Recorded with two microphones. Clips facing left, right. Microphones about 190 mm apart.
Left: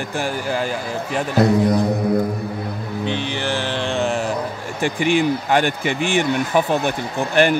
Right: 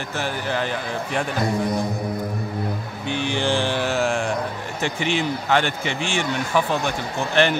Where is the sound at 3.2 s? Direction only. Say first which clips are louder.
Right 1 dB; 15° right (ahead or behind); by 4.3 s centre (ahead or behind).